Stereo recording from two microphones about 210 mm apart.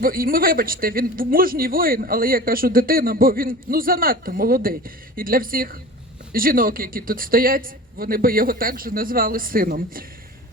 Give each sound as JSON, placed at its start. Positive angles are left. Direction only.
{"t": 0.0, "sound": "speech", "side_deg": -45}